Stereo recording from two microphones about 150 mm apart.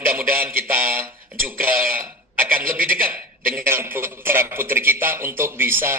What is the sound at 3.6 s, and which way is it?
A man's voice, 15° right (ahead or behind).